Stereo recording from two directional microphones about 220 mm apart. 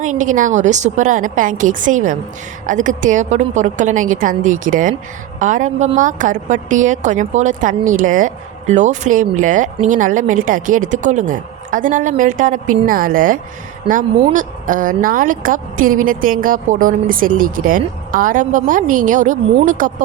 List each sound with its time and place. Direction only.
0.0 s a woman's voice: 35° right (ahead or behind)
13.9 s speech: 25° right (ahead or behind)
14.3 s a woman's voice: 35° right (ahead or behind)